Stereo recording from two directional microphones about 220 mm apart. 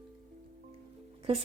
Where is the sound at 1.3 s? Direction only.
25° right (ahead or behind).